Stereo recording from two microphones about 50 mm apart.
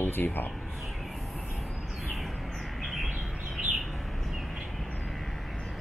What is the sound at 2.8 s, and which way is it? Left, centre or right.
Bird, centre.